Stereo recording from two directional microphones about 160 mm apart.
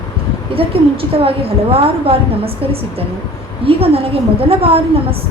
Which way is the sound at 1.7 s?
35° right (ahead or behind).